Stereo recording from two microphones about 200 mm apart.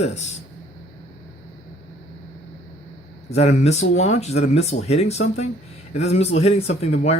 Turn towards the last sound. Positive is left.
turn(degrees=35)  # may be behind; listen again after turning